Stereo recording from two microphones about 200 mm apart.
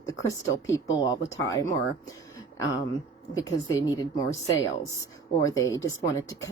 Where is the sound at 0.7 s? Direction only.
15° left (ahead or behind).